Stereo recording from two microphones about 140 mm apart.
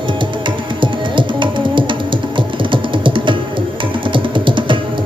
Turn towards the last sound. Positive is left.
turn(degrees=-35)  # may be behind; listen again after turning